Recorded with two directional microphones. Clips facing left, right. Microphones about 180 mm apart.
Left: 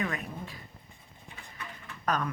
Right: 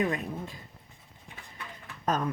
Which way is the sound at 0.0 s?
25° right (ahead or behind).